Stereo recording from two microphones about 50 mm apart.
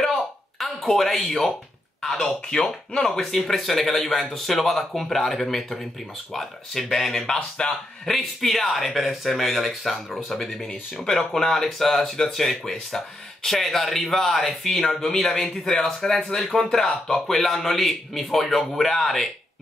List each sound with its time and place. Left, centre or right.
0.0 s a sound: centre
2.2 s a man's voice: centre
8.1 s a man's voice: centre